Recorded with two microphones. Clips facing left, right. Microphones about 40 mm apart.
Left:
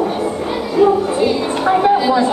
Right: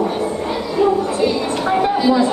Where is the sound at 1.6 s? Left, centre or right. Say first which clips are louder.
Left 3 dB; centre.